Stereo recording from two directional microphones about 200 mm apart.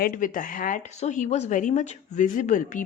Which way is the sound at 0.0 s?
45° left (ahead or behind).